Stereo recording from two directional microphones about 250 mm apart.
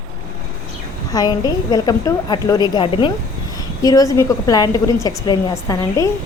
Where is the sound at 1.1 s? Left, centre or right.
Centre.